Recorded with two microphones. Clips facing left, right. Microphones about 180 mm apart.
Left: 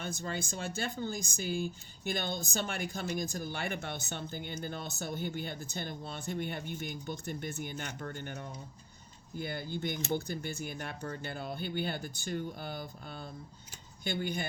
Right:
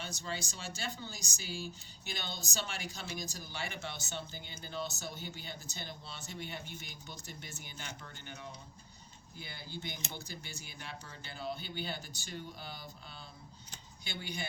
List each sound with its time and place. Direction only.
0.0 s speech: 50° left (ahead or behind)